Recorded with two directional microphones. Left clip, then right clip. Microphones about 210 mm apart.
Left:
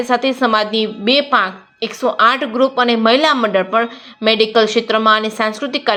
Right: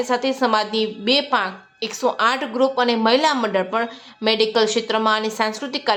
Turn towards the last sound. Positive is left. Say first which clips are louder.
# left 4 dB
turn(degrees=5)  # may be behind; listen again after turning